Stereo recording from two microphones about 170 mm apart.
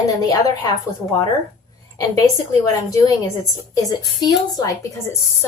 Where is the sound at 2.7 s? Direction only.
20° left (ahead or behind).